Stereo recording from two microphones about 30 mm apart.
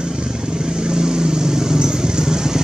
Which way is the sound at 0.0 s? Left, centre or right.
Right.